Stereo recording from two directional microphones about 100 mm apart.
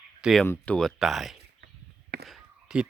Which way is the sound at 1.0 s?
Centre (ahead or behind).